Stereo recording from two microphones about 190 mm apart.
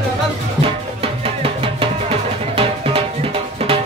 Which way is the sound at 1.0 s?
30° right (ahead or behind).